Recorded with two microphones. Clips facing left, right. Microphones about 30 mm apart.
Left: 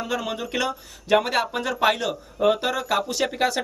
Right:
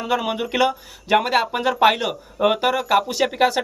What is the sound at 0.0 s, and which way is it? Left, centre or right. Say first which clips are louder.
Speech: right 5 dB; right.